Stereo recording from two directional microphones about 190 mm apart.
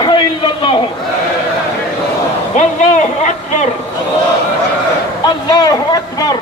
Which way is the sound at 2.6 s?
35° left (ahead or behind).